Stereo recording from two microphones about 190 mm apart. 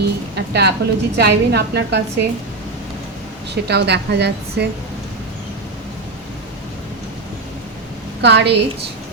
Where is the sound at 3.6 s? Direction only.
60° right (ahead or behind).